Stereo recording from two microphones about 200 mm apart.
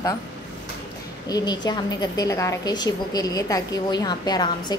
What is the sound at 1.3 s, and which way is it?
A woman's voice, 20° left (ahead or behind).